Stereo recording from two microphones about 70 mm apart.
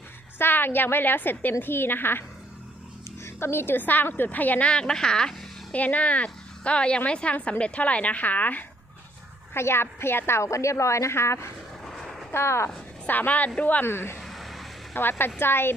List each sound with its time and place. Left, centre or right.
0.3 s a woman's voice: left
3.2 s a woman's voice: left
4.7 s speech: centre
5.7 s a woman's voice: left
9.6 s a woman's voice: left
11.9 s a sound: centre
12.3 s a woman's voice: left
13.1 s a woman's voice: left
13.8 s a woman's voice: left
14.2 s vehicle: centre
14.9 s a woman's voice: left